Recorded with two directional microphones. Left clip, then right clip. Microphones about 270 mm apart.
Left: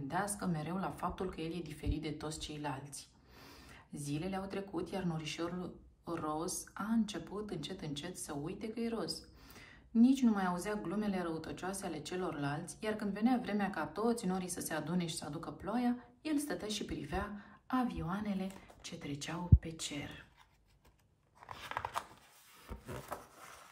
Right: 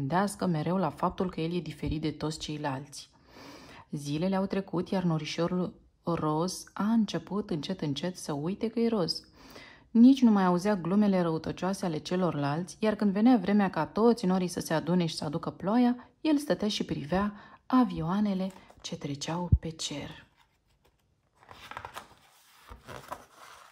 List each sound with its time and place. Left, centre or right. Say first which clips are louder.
0.1 s speech: right 9 dB; centre
10.1 s speech: right 9 dB; centre
21.5 s a sound: left 1 dB; centre